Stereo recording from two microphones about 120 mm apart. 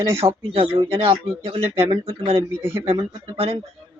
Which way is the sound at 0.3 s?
50° right (ahead or behind).